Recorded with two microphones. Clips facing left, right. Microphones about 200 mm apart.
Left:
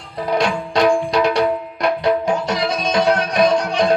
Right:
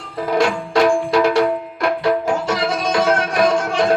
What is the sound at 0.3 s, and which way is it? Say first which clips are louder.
Music: right 1 dB; 20° left (ahead or behind).